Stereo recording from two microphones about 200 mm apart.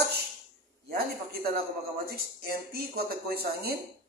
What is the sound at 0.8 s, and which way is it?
A man's voice, 50° right (ahead or behind).